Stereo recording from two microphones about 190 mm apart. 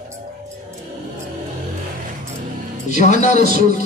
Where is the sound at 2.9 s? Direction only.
40° left (ahead or behind).